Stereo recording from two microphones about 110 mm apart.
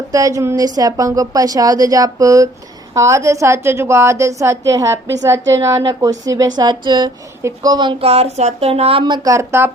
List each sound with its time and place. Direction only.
0.1 s a woman's voice: 30° right (ahead or behind)
8.0 s speech: 70° right (ahead or behind); by 9.3 s 45° right (ahead or behind)
9.3 s a woman's voice: 25° right (ahead or behind)